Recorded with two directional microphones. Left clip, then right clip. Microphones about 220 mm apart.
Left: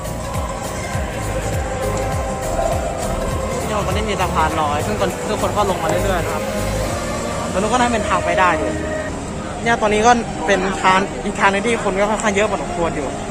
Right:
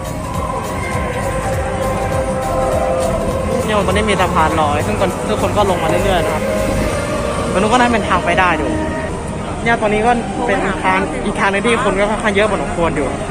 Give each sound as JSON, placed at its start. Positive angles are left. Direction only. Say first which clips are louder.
{"t": 3.9, "sound": "speech", "louder": "right 5 dB", "side_deg": 0}
{"t": 4.7, "sound": "speech", "louder": "right 3 dB", "side_deg": 15}
{"t": 7.7, "sound": "speech", "louder": "right 3 dB", "side_deg": 10}
{"t": 9.8, "sound": "speech", "louder": "left 4 dB", "side_deg": 30}
{"t": 11.3, "sound": "speech", "louder": "right 1 dB", "side_deg": 15}